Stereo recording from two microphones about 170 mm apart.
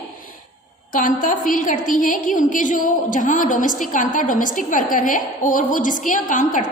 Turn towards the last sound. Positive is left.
turn(degrees=50)  # may be behind; listen again after turning